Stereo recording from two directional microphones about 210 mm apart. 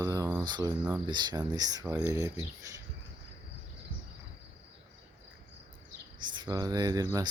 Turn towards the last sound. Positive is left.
turn(degrees=-15)  # may be behind; listen again after turning